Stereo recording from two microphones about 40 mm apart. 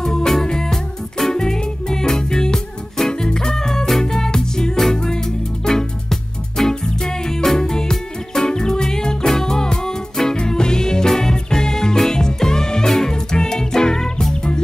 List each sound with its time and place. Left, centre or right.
0.0 s music: centre